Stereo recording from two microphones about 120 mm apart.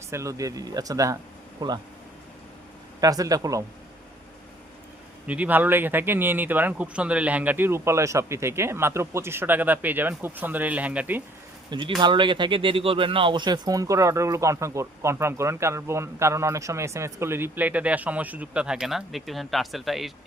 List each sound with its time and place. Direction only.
0.1 s speech: 25° right (ahead or behind)
3.0 s speech: 30° right (ahead or behind)
5.2 s speech: 10° right (ahead or behind)
11.9 s speech: 40° right (ahead or behind); by 20.1 s centre (ahead or behind)